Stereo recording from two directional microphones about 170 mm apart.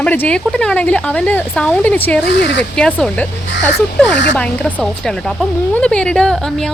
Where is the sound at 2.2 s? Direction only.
90° left.